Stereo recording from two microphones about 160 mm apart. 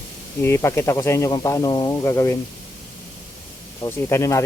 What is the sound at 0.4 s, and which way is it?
Speech, 15° left (ahead or behind).